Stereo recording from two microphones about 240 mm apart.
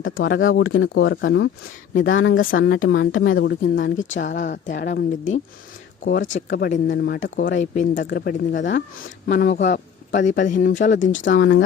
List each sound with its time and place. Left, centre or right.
0.0 s a woman's voice: left
6.1 s a man's voice: left
11.1 s a woman's voice: left